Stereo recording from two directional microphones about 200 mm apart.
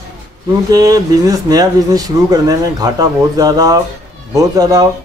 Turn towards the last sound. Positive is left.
turn(degrees=-15)  # may be behind; listen again after turning